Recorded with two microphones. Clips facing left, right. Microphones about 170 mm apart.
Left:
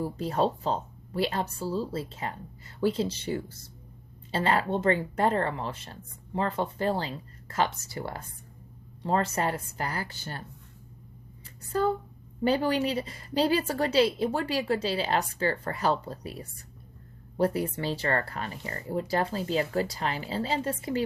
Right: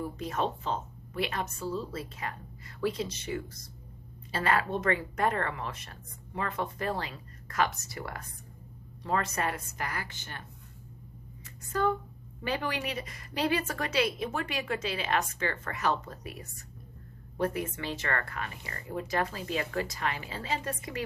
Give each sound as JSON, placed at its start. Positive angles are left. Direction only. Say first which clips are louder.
{"t": 0.0, "sound": "speech", "louder": "left 5 dB", "side_deg": 30}
{"t": 11.7, "sound": "speech", "louder": "left 2 dB", "side_deg": 35}